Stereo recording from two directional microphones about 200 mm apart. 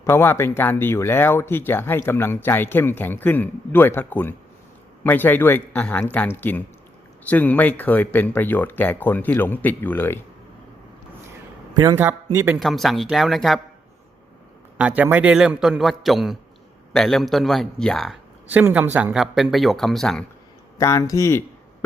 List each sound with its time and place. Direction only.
0.0 s speech: 10° left (ahead or behind)
11.8 s speech: 15° right (ahead or behind)
12.5 s a man's voice: centre (ahead or behind)
14.8 s a man's voice: 5° right (ahead or behind)
20.7 s speech: 15° left (ahead or behind)